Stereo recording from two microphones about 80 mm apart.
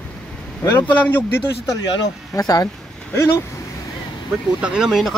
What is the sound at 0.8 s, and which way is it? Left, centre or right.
Speech, left.